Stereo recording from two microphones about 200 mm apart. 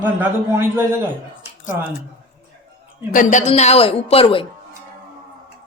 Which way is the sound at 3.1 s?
35° left (ahead or behind).